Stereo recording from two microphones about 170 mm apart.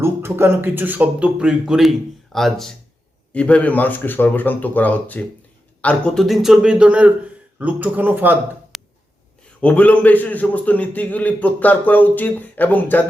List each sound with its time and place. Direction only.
0.0 s a man's voice: 15° right (ahead or behind)
8.7 s a sound: centre (ahead or behind)
9.6 s a man's voice: 10° left (ahead or behind)